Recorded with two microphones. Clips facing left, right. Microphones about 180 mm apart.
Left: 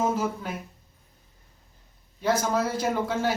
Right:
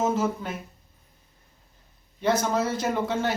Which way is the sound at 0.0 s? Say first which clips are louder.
Right 1 dB; 10° left (ahead or behind).